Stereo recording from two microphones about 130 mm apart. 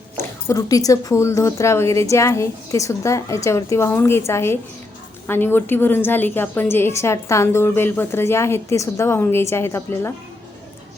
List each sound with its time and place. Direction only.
0.2 s a woman's voice: 25° left (ahead or behind)